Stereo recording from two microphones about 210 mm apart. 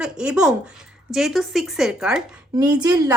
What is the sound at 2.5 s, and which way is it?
Speech, 20° right (ahead or behind).